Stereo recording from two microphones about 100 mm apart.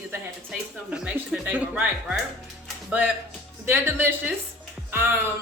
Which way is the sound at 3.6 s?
20° right (ahead or behind).